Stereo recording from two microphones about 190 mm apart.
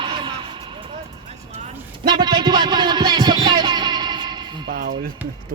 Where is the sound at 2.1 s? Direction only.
20° right (ahead or behind).